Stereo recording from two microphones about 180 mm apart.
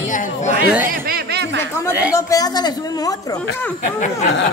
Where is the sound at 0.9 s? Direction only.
55° right (ahead or behind); by 1.7 s 80° right.